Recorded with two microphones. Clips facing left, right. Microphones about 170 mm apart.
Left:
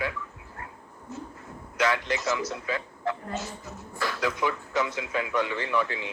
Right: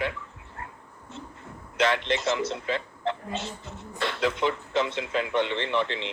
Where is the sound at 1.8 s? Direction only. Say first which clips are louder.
Right 2 dB; 25° right (ahead or behind).